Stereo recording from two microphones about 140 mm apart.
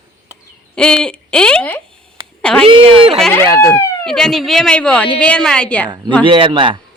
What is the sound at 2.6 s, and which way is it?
Speech, 40° right (ahead or behind).